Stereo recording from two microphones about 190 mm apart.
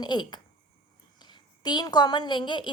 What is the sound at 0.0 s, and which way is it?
A woman's voice, 25° left (ahead or behind).